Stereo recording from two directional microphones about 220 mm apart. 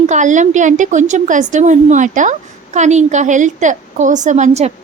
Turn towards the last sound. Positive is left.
turn(degrees=-30)  # may be behind; listen again after turning